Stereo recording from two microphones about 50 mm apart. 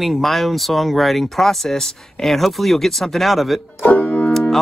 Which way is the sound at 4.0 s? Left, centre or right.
Left.